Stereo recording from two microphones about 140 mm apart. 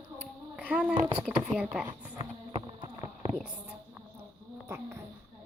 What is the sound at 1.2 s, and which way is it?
Speech, 5° right (ahead or behind).